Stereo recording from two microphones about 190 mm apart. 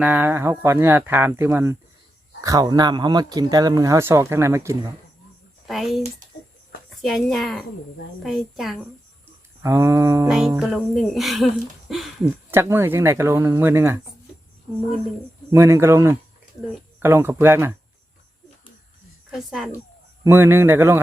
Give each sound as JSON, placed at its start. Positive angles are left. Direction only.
{"t": 0.0, "sound": "speech", "side_deg": -10}
{"t": 5.6, "sound": "speech", "side_deg": 0}
{"t": 7.0, "sound": "speech", "side_deg": 0}
{"t": 9.6, "sound": "speech", "side_deg": -15}
{"t": 10.2, "sound": "speech", "side_deg": 0}
{"t": 12.5, "sound": "speech", "side_deg": -10}
{"t": 15.4, "sound": "speech", "side_deg": -15}
{"t": 19.3, "sound": "speech", "side_deg": 0}
{"t": 20.2, "sound": "speech", "side_deg": -15}